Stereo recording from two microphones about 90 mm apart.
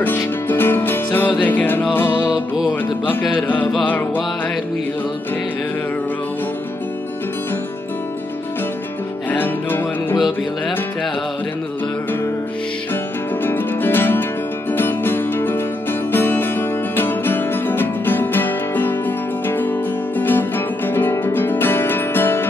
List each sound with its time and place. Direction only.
0.0 s music: 20° left (ahead or behind)
3.8 s music: 20° left (ahead or behind)
9.3 s music: 20° left (ahead or behind)
13.4 s music: 20° left (ahead or behind)